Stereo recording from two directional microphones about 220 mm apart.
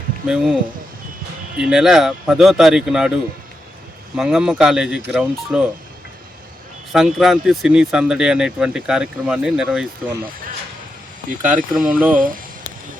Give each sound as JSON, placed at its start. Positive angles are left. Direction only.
{"t": 0.3, "sound": "speech", "side_deg": -5}
{"t": 4.2, "sound": "speech", "side_deg": 0}
{"t": 6.9, "sound": "speech", "side_deg": 0}
{"t": 11.4, "sound": "speech", "side_deg": -5}